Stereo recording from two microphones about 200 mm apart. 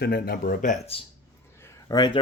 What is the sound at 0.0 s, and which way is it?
Speech, 50° left (ahead or behind).